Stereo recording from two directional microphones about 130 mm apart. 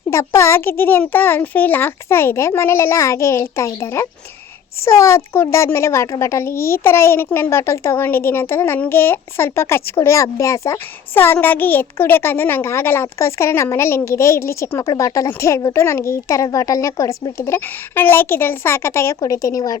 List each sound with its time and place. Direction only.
0.1 s speech: 20° left (ahead or behind)